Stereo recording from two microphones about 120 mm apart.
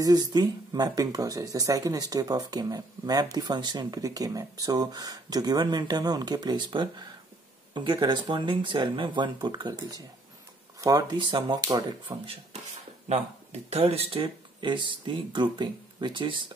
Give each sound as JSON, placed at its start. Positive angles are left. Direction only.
{"t": 0.0, "sound": "speech", "side_deg": -35}
{"t": 11.1, "sound": "speech", "side_deg": -45}
{"t": 13.1, "sound": "speech", "side_deg": -60}